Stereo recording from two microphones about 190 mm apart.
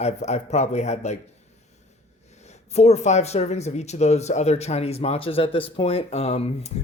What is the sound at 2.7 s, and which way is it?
Speech, 35° left (ahead or behind).